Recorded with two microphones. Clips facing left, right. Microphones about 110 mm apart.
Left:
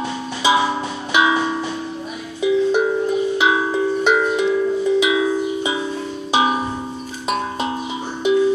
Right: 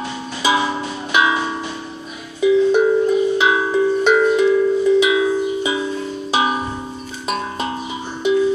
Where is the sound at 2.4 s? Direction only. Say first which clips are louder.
Right 3 dB; 15° left (ahead or behind).